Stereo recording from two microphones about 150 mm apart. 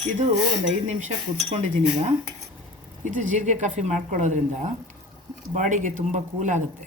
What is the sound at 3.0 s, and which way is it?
Speech, 55° right (ahead or behind).